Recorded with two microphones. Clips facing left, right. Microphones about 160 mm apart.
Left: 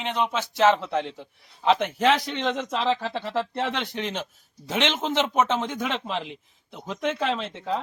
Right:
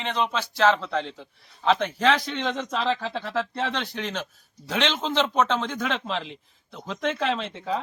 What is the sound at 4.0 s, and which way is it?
A man's voice, 20° left (ahead or behind).